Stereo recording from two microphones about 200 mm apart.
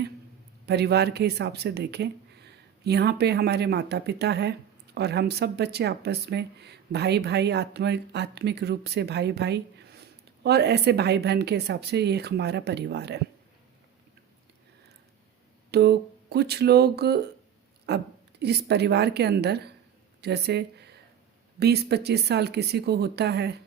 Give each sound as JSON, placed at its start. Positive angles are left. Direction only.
{"t": 0.6, "sound": "speech", "side_deg": -55}
{"t": 15.7, "sound": "a sound", "side_deg": -55}
{"t": 17.8, "sound": "speech", "side_deg": -55}